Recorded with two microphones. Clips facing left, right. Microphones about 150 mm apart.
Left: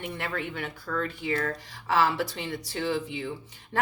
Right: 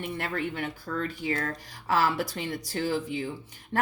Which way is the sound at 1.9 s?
45° right (ahead or behind).